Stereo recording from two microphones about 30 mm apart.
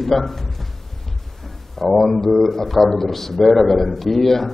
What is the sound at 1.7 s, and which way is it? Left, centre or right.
Speech, centre.